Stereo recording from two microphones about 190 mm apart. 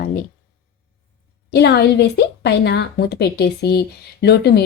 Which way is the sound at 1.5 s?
60° left (ahead or behind).